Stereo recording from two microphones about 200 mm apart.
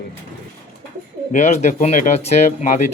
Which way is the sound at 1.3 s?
35° left (ahead or behind).